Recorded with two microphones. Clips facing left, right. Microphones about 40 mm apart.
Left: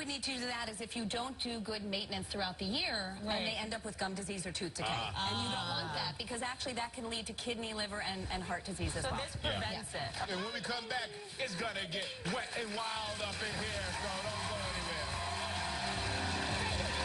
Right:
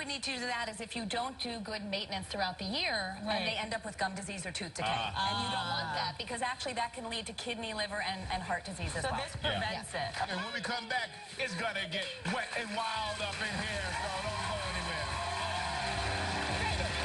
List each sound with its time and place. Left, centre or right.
0.5 s a woman's voice: right
1.2 s a woman's voice: right